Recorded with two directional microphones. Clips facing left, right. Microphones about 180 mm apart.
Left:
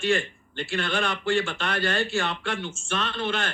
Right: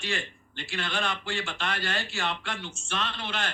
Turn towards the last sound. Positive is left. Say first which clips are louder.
# left 5 dB
turn(degrees=55)  # may be behind; listen again after turning